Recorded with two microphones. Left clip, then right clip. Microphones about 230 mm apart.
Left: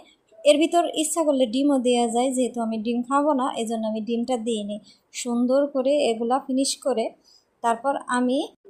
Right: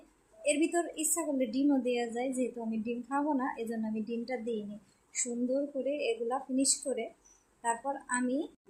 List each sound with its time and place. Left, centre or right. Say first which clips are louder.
0.4 s a woman's voice: left 12 dB; left
8.1 s a woman's voice: left 7 dB; left